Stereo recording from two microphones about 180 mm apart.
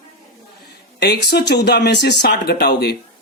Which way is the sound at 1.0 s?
65° left (ahead or behind).